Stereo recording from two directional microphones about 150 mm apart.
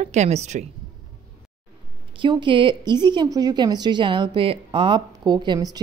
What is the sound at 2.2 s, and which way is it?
A woman's voice, 35° right (ahead or behind).